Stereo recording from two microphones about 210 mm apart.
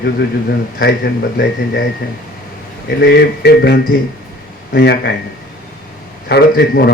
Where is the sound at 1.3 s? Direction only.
50° left (ahead or behind).